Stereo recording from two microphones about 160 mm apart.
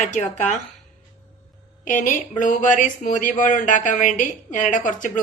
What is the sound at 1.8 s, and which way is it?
Speech, 55° left (ahead or behind).